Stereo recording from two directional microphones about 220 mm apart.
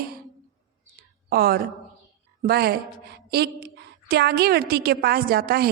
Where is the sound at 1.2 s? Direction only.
45° right (ahead or behind).